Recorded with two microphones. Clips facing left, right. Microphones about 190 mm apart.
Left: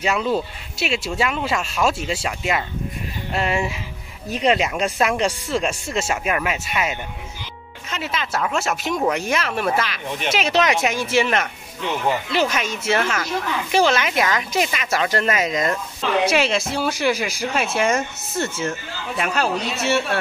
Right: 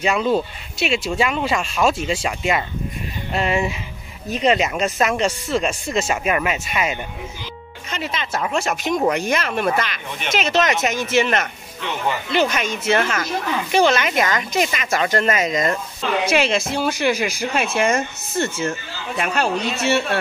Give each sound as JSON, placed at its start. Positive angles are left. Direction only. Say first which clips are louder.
{"t": 0.0, "sound": "speech", "louder": "right 2 dB", "side_deg": 0}